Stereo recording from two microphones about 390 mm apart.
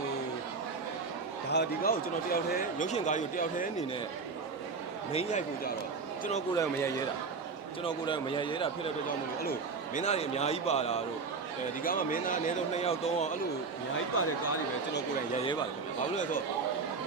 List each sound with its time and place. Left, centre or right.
1.5 s speech: left
5.1 s a man's voice: centre